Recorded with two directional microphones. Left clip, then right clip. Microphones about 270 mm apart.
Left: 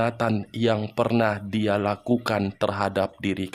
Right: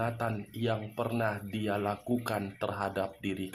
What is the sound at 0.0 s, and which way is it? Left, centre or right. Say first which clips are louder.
Speech: left 9 dB; left.